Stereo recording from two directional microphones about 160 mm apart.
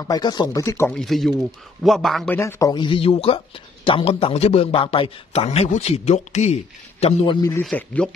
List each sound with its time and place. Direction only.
0.0 s speech: 25° left (ahead or behind)
0.8 s speech: 5° left (ahead or behind)
2.3 s speech: 20° left (ahead or behind); by 7.3 s 40° left (ahead or behind)
7.6 s speech: 5° left (ahead or behind)